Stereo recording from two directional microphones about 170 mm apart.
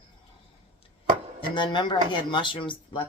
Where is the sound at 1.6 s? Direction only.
25° left (ahead or behind).